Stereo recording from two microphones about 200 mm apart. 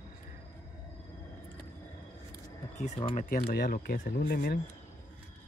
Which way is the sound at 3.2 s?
50° left (ahead or behind).